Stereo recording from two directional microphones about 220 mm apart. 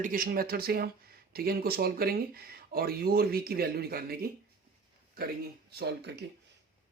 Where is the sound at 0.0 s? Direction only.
40° right (ahead or behind).